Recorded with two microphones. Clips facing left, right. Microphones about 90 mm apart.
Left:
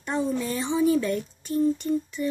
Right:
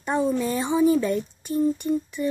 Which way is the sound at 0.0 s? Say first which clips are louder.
Right 4 dB; 15° right (ahead or behind).